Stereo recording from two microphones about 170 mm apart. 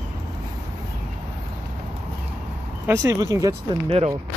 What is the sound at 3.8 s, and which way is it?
Speech, 35° right (ahead or behind).